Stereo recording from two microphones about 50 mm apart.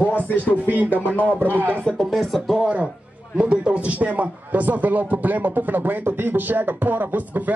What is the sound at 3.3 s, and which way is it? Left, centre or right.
A man's voice, right.